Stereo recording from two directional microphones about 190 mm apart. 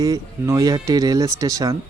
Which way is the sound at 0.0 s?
20° right (ahead or behind).